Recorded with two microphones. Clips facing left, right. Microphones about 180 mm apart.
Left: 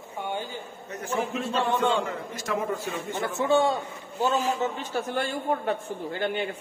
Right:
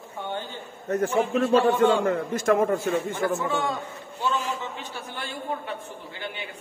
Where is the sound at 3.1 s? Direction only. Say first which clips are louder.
Left 2 dB; 30° left (ahead or behind).